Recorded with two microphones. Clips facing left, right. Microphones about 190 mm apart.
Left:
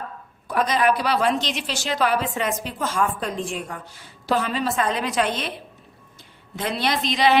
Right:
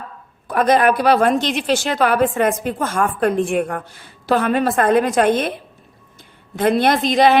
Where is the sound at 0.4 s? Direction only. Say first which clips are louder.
Right 6 dB; 55° right (ahead or behind).